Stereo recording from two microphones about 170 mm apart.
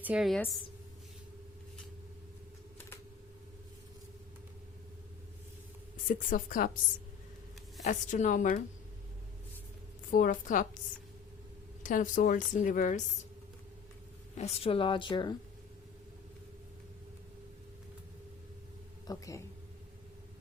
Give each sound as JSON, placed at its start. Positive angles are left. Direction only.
{"t": 0.0, "sound": "a woman's voice", "side_deg": -5}
{"t": 6.1, "sound": "a woman's voice", "side_deg": 50}
{"t": 7.9, "sound": "a woman's voice", "side_deg": 50}
{"t": 10.1, "sound": "a woman's voice", "side_deg": 55}
{"t": 11.8, "sound": "a woman's voice", "side_deg": 50}
{"t": 14.3, "sound": "speech", "side_deg": 40}
{"t": 19.0, "sound": "speech", "side_deg": 20}